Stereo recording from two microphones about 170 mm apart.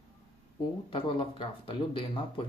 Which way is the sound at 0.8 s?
30° left (ahead or behind).